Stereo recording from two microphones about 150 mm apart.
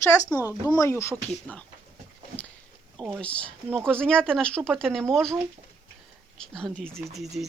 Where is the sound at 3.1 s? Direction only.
10° left (ahead or behind).